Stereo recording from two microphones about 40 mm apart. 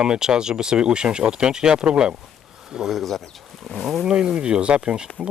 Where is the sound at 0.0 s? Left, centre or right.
Centre.